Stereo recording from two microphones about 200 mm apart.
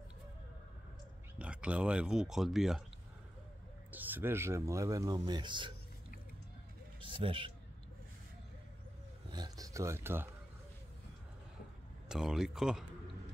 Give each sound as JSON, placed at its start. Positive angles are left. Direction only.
{"t": 1.4, "sound": "speech", "side_deg": -5}
{"t": 3.9, "sound": "speech", "side_deg": -10}
{"t": 7.0, "sound": "a man's voice", "side_deg": -25}
{"t": 9.3, "sound": "speech", "side_deg": -20}
{"t": 12.1, "sound": "speech", "side_deg": 0}